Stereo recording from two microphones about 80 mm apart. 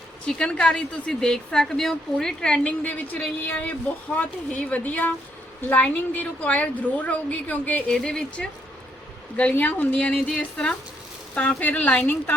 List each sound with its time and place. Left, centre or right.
0.3 s a woman's voice: centre
7.9 s speech: centre
9.4 s speech: centre
11.3 s a woman's voice: centre